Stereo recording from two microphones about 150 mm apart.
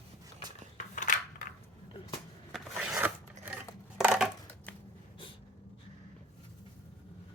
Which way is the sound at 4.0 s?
10° right (ahead or behind).